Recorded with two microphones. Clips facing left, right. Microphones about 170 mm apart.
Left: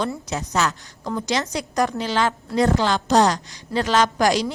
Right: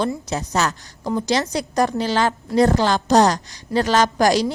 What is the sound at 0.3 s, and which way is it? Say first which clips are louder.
A woman's voice: right 1 dB; 35° right (ahead or behind).